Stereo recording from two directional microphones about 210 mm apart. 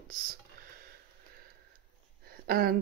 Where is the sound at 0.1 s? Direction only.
45° right (ahead or behind).